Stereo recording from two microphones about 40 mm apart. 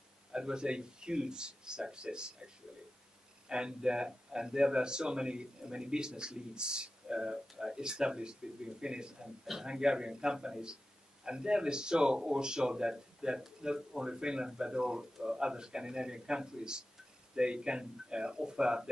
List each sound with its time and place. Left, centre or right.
0.3 s speech: centre